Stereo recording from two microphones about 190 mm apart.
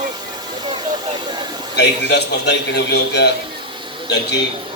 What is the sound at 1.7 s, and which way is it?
A man's voice, 65° left (ahead or behind).